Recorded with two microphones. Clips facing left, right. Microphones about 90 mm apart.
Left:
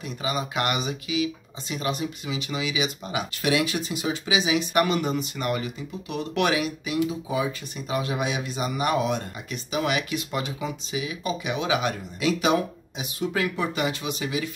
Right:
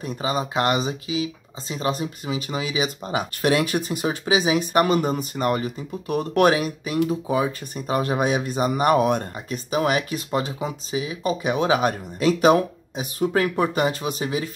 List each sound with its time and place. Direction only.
0.0 s speech: 30° right (ahead or behind)